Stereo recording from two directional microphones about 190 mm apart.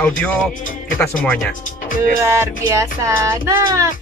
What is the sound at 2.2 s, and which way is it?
Music, 15° right (ahead or behind).